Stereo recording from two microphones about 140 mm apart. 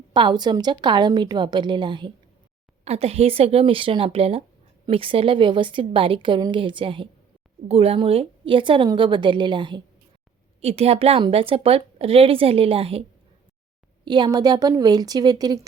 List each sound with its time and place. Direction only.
0.1 s a woman's voice: 30° right (ahead or behind)
2.8 s a woman's voice: 50° right (ahead or behind)
10.6 s a woman's voice: 45° right (ahead or behind)
14.0 s speech: 30° right (ahead or behind)